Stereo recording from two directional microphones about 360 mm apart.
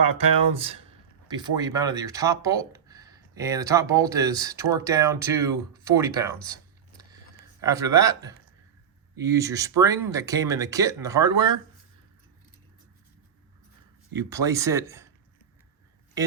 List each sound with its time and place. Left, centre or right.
0.5 s speech: centre
14.2 s speech: centre
16.2 s speech: centre